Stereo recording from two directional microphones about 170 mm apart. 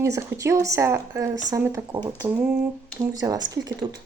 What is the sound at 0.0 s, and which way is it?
Speech, 15° right (ahead or behind).